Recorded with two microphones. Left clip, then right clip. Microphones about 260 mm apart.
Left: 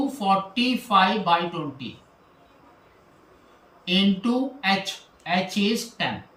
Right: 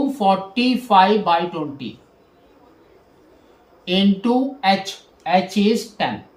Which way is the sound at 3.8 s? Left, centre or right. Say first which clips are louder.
Right 4 dB; centre.